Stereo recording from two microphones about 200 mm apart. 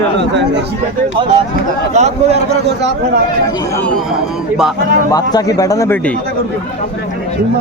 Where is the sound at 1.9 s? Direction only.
35° right (ahead or behind).